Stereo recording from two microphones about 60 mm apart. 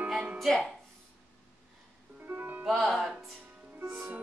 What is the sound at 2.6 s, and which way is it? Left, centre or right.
Speech, centre.